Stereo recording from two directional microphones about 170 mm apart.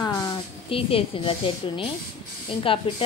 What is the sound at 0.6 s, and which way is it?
Speech, 35° left (ahead or behind).